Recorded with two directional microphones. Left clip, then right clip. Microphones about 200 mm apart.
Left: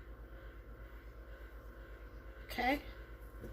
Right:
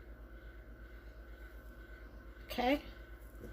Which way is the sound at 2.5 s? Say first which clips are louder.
Right 1 dB; 40° right (ahead or behind).